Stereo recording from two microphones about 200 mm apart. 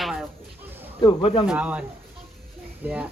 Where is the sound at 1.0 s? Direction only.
25° left (ahead or behind).